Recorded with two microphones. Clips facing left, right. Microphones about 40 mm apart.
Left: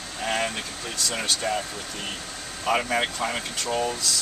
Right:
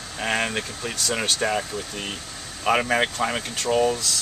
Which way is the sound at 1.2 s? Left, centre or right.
Right.